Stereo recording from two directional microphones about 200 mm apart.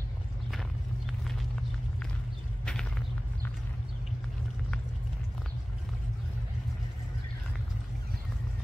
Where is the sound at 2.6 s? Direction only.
5° left (ahead or behind).